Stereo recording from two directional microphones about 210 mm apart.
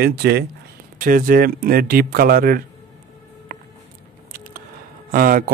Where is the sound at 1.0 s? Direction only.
40° right (ahead or behind).